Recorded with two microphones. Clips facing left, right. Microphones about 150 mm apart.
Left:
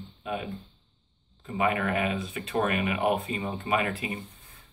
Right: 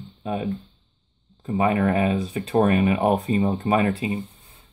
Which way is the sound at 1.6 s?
35° right (ahead or behind).